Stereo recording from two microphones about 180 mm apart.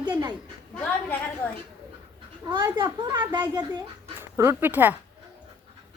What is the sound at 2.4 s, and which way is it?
A child's voice, 25° right (ahead or behind).